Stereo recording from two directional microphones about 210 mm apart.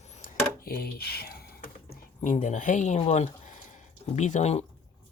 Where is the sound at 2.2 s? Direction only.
35° left (ahead or behind).